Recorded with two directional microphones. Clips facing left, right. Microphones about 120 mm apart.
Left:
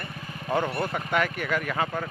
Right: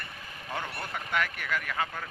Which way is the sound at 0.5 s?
35° left (ahead or behind).